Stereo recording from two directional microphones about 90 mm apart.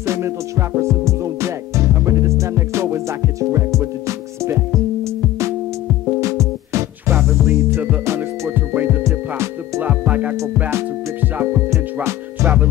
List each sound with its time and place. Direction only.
0.0 s music: 30° right (ahead or behind)
6.2 s music: 35° right (ahead or behind); by 10.3 s 20° right (ahead or behind)
11.7 s music: 35° right (ahead or behind)